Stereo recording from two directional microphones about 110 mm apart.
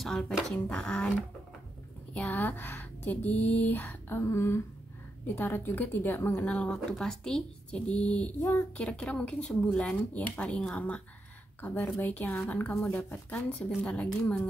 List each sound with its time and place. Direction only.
0.0 s a woman's voice: 5° left (ahead or behind)
2.1 s a woman's voice: 15° left (ahead or behind)
4.2 s a sound: 25° left (ahead or behind)
5.2 s a woman's voice: 15° left (ahead or behind)